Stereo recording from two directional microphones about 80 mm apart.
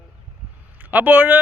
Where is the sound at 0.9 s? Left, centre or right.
Centre.